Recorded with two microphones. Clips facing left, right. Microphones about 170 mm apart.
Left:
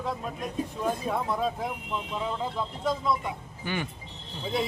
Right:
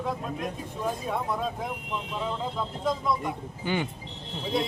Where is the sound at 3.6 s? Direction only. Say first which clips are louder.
Right 3 dB; 20° right (ahead or behind).